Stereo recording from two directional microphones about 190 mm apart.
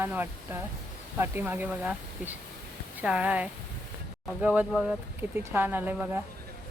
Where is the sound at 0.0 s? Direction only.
10° right (ahead or behind).